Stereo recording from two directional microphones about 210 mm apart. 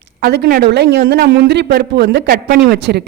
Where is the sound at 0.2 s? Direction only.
50° right (ahead or behind).